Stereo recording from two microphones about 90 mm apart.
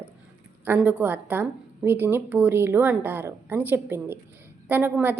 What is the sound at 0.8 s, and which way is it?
A woman's voice, 15° right (ahead or behind).